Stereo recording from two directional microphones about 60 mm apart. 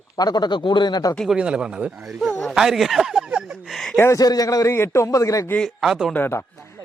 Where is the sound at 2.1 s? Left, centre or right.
Centre.